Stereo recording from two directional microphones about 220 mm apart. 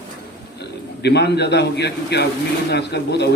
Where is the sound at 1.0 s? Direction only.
50° left (ahead or behind).